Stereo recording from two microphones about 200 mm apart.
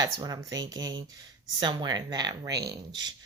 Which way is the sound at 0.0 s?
20° right (ahead or behind).